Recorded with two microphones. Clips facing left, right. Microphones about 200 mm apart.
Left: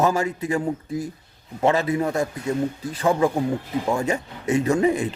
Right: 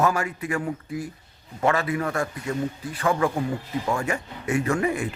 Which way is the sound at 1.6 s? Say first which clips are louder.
Left 3 dB; 25° left (ahead or behind).